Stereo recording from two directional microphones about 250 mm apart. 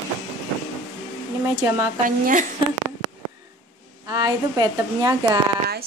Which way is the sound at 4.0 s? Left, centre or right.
Centre.